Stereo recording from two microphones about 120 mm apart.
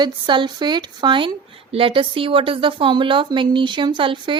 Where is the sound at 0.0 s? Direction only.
40° right (ahead or behind).